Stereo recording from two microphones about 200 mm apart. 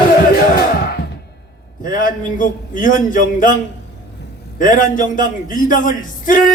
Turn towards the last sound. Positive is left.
turn(degrees=40)  # may be behind; listen again after turning